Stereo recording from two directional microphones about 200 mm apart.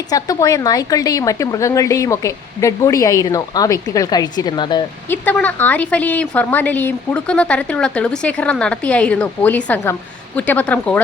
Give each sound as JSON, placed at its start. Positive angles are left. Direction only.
{"t": 0.1, "sound": "a woman's voice", "side_deg": 15}
{"t": 5.0, "sound": "a woman's voice", "side_deg": 10}